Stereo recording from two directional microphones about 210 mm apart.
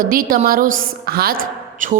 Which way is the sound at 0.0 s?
45° right (ahead or behind).